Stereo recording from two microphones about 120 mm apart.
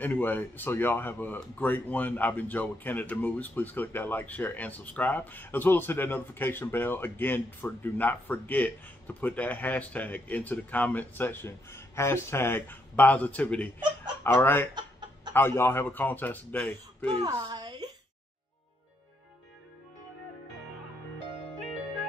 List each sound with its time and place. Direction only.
0.0 s speech: 15° left (ahead or behind)
14.7 s chicken: 40° right (ahead or behind)
15.3 s speech: 20° left (ahead or behind)
17.2 s a woman's voice: 35° right (ahead or behind)